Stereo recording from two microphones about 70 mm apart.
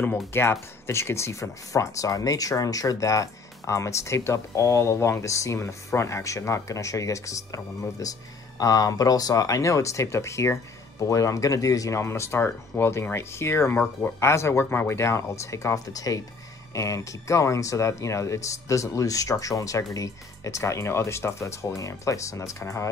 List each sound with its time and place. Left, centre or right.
0.3 s speech: left
8.5 s speech: left